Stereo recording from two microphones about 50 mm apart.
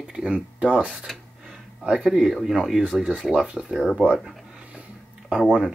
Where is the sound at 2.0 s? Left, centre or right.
Centre.